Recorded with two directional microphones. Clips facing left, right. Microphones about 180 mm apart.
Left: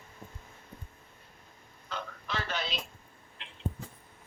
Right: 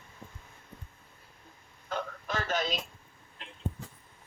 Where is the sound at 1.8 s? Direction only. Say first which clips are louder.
Right 4 dB; 50° right (ahead or behind).